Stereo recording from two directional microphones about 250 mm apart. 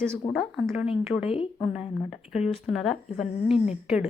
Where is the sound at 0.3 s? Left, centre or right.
Centre.